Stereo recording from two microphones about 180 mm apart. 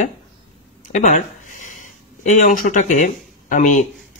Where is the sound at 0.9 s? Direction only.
45° left (ahead or behind).